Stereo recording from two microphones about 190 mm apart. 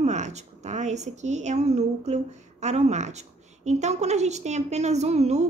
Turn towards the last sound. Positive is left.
turn(degrees=-35)  # may be behind; listen again after turning